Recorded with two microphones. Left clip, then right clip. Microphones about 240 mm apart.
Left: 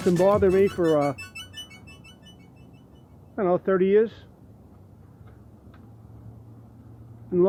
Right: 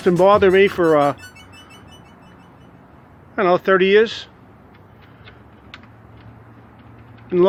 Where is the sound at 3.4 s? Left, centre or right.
Centre.